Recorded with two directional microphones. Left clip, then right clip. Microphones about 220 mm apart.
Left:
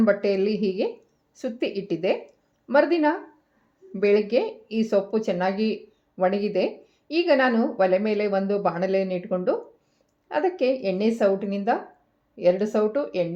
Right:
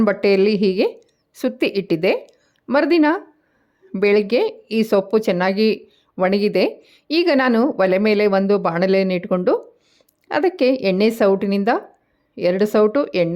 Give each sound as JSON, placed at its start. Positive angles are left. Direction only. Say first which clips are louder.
{"t": 0.0, "sound": "a woman's voice", "louder": "right 6 dB", "side_deg": -40}